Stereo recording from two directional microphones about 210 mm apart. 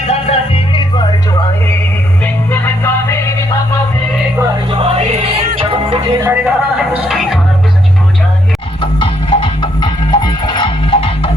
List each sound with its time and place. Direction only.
0.1 s music: 25° left (ahead or behind)
2.2 s music: 10° left (ahead or behind)
5.5 s music: 25° right (ahead or behind)
6.2 s speech: 5° right (ahead or behind)
8.8 s music: 25° left (ahead or behind)